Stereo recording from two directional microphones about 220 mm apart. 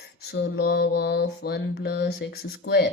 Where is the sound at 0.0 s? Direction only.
45° left (ahead or behind).